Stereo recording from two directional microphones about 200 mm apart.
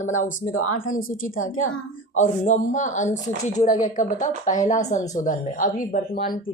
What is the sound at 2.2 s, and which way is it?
A woman's voice, 40° left (ahead or behind).